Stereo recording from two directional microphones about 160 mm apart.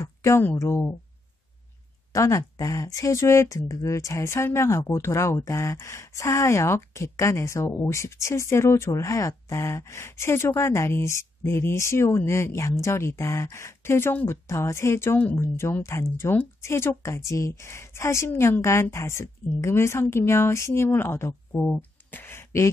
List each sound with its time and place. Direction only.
0.0 s speech: 15° left (ahead or behind)
2.1 s speech: 20° left (ahead or behind)